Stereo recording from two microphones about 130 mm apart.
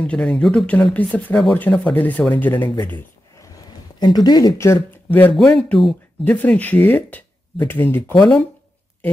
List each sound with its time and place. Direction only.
0.0 s speech: 10° left (ahead or behind)
4.0 s speech: 30° left (ahead or behind); by 5.3 s 15° left (ahead or behind)
5.3 s speech: 5° left (ahead or behind)